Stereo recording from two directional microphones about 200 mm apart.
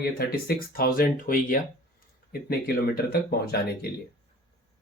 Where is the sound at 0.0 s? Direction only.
50° left (ahead or behind).